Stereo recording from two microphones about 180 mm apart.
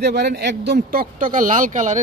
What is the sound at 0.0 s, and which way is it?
Speech, 65° right (ahead or behind).